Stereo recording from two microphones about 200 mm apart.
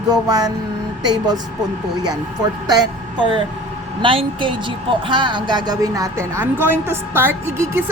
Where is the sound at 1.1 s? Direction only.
20° right (ahead or behind).